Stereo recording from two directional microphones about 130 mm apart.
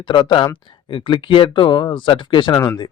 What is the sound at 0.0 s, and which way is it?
A man's voice, 40° left (ahead or behind).